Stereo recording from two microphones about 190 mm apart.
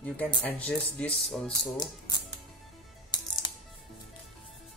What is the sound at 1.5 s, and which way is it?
Speech, 20° left (ahead or behind).